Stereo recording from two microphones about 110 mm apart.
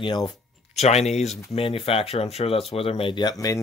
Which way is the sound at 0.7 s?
75° left (ahead or behind).